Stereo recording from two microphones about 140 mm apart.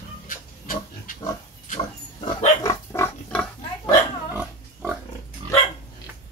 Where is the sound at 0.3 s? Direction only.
70° left (ahead or behind).